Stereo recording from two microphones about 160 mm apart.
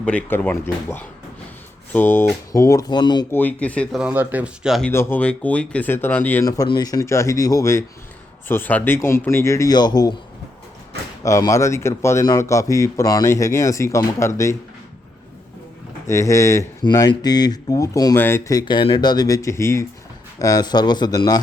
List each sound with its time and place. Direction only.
0.0 s a man's voice: 10° left (ahead or behind); by 3.2 s 25° left (ahead or behind)
3.3 s a man's voice: 10° left (ahead or behind)
4.0 s speech: 10° right (ahead or behind)
4.9 s a man's voice: 15° left (ahead or behind)
6.4 s a man's voice: 25° left (ahead or behind)
11.2 s a man's voice: 20° left (ahead or behind)
16.0 s a man's voice: 20° left (ahead or behind)
18.6 s a man's voice: 30° left (ahead or behind)